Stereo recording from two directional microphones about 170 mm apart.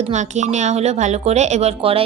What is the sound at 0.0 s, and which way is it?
A woman's voice, 45° right (ahead or behind).